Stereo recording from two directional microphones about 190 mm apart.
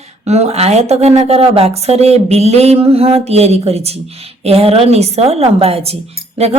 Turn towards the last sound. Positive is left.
turn(degrees=-30)  # may be behind; listen again after turning